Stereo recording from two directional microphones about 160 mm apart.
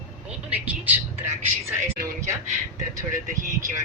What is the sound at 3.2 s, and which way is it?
Speech, 55° right (ahead or behind).